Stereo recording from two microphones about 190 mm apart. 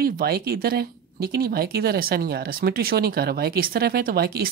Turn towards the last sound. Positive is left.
turn(degrees=-55)  # may be behind; listen again after turning